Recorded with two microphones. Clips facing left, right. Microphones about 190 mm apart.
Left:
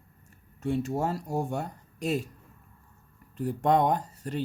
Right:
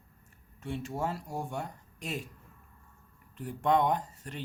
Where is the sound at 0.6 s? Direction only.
40° left (ahead or behind).